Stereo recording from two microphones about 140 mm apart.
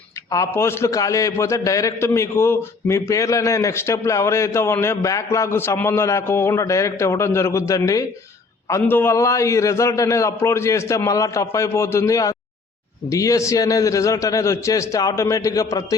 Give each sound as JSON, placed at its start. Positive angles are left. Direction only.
{"t": 0.3, "sound": "a man's voice", "side_deg": 20}